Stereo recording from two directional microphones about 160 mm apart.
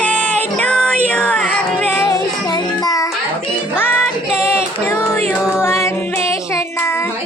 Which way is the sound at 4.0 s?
5° right (ahead or behind).